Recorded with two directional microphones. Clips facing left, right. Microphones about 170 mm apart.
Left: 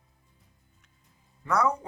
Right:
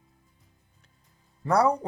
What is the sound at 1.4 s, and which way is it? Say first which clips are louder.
Speech: right 4 dB; 35° right (ahead or behind).